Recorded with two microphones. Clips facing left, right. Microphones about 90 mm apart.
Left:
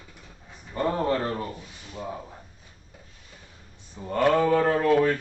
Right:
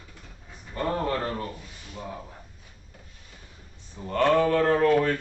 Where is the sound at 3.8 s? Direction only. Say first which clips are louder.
Even; 15° left (ahead or behind).